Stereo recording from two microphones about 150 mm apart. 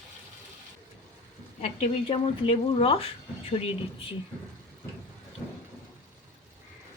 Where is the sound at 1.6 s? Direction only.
45° left (ahead or behind).